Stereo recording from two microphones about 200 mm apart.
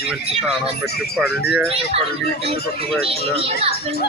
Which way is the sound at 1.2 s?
55° left (ahead or behind).